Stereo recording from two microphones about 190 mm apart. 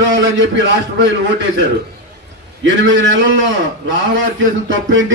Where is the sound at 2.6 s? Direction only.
80° right.